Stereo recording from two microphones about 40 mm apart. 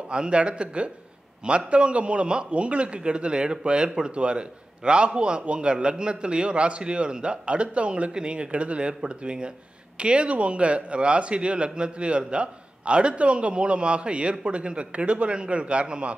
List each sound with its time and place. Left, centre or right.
0.1 s speech: right